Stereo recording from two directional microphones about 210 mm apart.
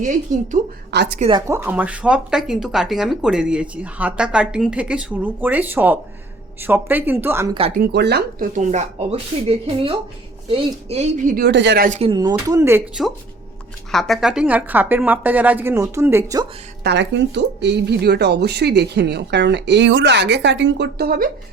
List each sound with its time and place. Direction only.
0.0 s a woman's voice: 35° right (ahead or behind)
0.9 s a woman's voice: 50° right (ahead or behind)
1.5 s a woman's voice: 10° right (ahead or behind)
7.8 s a woman's voice: 50° right (ahead or behind)
8.5 s a woman's voice: 35° right (ahead or behind); by 11.9 s 55° right (ahead or behind)
11.9 s a woman's voice: 30° right (ahead or behind)
12.1 s a woman's voice: 20° right (ahead or behind)
16.8 s speech: 55° right (ahead or behind)